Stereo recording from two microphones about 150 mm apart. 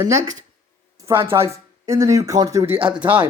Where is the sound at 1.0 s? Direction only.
20° right (ahead or behind).